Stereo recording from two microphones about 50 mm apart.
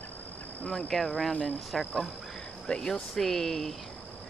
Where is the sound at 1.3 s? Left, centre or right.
Left.